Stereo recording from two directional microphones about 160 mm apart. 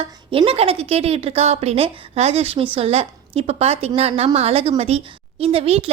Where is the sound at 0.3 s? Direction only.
35° right (ahead or behind).